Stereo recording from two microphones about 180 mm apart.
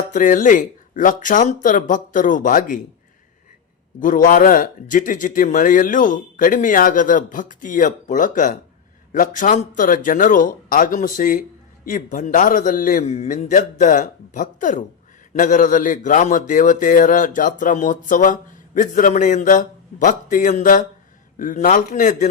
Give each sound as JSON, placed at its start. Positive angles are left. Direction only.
{"t": 0.1, "sound": "a man's voice", "side_deg": 45}
{"t": 4.0, "sound": "a man's voice", "side_deg": 50}